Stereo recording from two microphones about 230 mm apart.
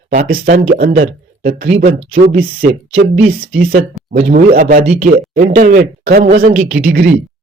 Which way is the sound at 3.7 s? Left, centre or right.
Right.